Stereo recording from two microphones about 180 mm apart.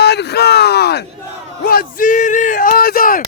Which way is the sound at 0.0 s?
65° left (ahead or behind).